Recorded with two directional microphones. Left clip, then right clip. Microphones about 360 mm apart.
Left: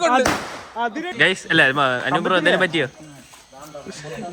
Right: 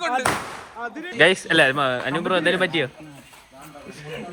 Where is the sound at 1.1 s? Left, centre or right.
Centre.